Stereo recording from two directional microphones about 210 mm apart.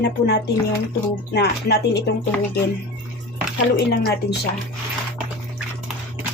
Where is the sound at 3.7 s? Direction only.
50° left (ahead or behind).